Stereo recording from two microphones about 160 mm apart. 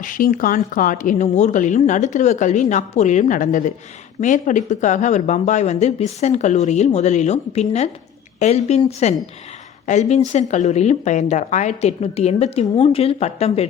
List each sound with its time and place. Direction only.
0.0 s a woman's voice: 55° left (ahead or behind); by 13.7 s 40° left (ahead or behind)